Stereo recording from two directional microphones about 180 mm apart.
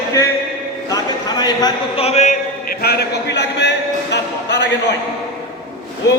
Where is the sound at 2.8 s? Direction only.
65° left (ahead or behind).